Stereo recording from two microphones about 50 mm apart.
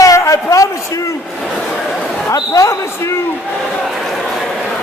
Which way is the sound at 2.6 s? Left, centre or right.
Left.